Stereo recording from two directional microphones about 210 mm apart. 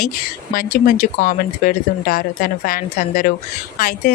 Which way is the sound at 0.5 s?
40° left (ahead or behind).